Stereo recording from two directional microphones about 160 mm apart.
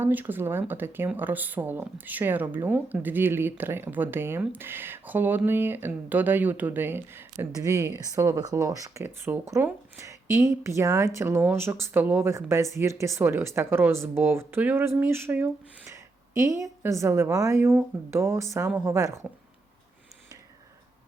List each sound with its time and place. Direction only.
0.0 s speech: 10° right (ahead or behind)